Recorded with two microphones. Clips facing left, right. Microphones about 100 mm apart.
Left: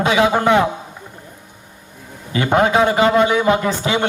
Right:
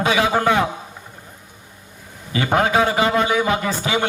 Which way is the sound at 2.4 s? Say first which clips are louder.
Left 3 dB; 20° left (ahead or behind).